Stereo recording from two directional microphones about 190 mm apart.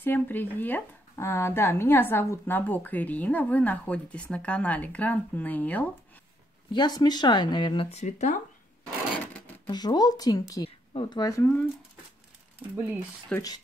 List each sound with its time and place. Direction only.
0.0 s speech: 10° left (ahead or behind)
6.7 s speech: 20° left (ahead or behind)
9.7 s speech: 20° left (ahead or behind)
13.3 s speech: 5° left (ahead or behind)